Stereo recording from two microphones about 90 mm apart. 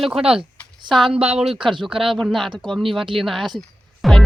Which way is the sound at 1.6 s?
65° right (ahead or behind).